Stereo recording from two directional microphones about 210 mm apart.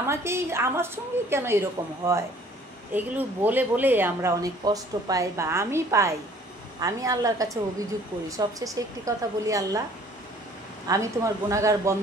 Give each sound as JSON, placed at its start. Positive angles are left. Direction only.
{"t": 0.0, "sound": "speech", "side_deg": -10}
{"t": 10.9, "sound": "speech", "side_deg": -15}